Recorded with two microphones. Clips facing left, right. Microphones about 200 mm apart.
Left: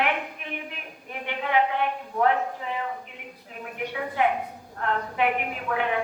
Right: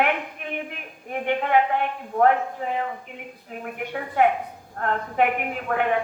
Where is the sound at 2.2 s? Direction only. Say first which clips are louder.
Right 4 dB; 45° right (ahead or behind).